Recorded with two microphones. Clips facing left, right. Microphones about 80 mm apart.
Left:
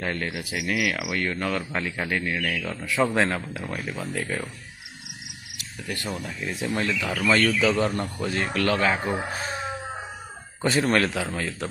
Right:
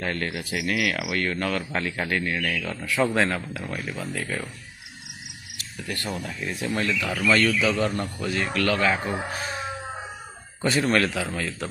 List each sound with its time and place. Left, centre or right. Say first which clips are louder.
0.0 s speech: even; centre; by 4.5 s left
5.6 s a man's voice: even; centre
9.0 s speech: left 1 dB; centre
9.3 s speech: even; left
10.6 s a man's voice: even; left